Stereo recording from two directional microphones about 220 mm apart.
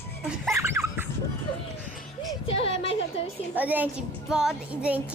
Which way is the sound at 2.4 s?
25° left (ahead or behind).